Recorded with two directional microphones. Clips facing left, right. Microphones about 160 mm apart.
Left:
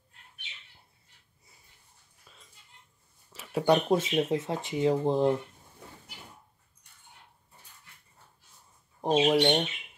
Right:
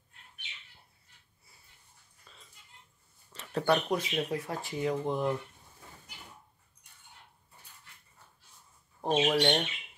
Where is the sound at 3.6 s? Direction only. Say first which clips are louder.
Left 4 dB; 20° left (ahead or behind).